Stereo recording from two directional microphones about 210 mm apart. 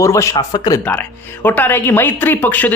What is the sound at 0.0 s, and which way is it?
Speech, 15° left (ahead or behind).